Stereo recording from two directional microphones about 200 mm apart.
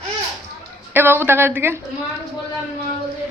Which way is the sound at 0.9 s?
10° right (ahead or behind).